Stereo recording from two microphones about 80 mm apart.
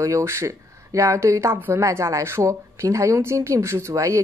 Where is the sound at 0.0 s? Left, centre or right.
Right.